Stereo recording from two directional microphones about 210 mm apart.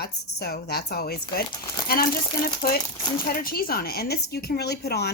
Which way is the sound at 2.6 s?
45° left (ahead or behind).